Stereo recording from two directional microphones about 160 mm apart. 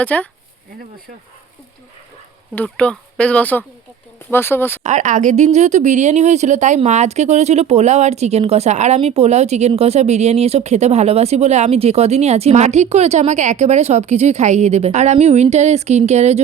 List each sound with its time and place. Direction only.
0.0 s speech: 10° left (ahead or behind)
2.6 s speech: 5° left (ahead or behind)
4.8 s speech: 50° right (ahead or behind)